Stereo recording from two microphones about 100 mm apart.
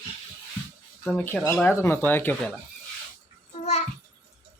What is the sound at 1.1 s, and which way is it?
Speech, 20° left (ahead or behind).